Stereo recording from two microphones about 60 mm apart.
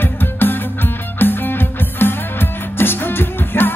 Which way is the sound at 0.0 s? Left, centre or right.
Left.